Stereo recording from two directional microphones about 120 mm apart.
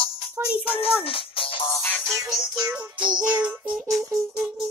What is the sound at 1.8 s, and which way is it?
Music, 10° left (ahead or behind).